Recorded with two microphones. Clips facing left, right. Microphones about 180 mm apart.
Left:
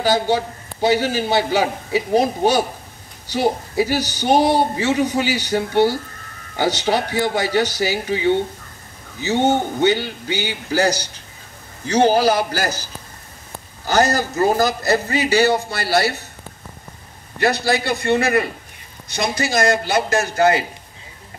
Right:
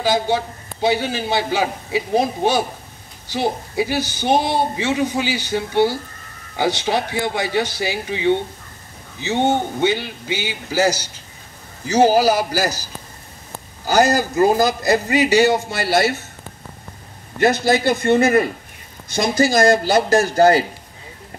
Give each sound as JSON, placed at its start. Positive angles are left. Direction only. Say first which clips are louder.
{"t": 0.0, "sound": "a man's voice", "louder": "left 1 dB", "side_deg": 0}
{"t": 13.8, "sound": "a man's voice", "louder": "right 2 dB", "side_deg": -15}
{"t": 17.4, "sound": "a man's voice", "louder": "right 3 dB", "side_deg": -25}